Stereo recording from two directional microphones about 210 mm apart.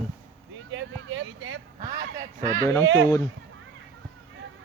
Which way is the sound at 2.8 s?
65° right (ahead or behind).